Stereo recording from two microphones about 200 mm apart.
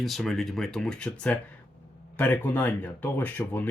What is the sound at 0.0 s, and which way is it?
Speech, centre (ahead or behind).